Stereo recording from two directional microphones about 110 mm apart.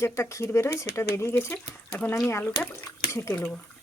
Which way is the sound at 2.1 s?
30° left (ahead or behind).